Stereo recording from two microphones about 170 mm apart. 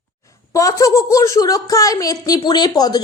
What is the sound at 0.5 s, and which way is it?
A woman's voice, 20° left (ahead or behind).